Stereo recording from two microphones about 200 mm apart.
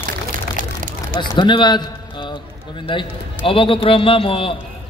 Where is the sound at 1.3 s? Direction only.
25° left (ahead or behind).